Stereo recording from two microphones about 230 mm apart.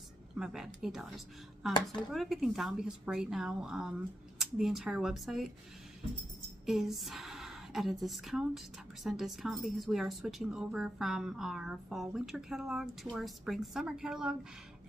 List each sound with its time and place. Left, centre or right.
0.4 s speech: centre
6.6 s a woman's voice: centre